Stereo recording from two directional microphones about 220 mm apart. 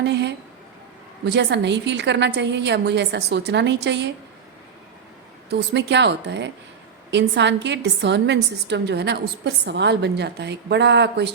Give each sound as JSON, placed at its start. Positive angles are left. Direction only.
{"t": 0.0, "sound": "a sound", "side_deg": -50}
{"t": 1.2, "sound": "a woman's voice", "side_deg": -50}
{"t": 5.5, "sound": "a woman's voice", "side_deg": -50}